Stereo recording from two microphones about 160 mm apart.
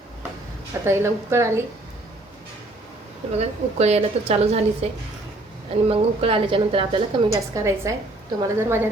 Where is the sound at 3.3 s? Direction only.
40° right (ahead or behind).